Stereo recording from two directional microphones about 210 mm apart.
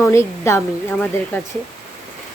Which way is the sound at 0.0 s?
15° left (ahead or behind).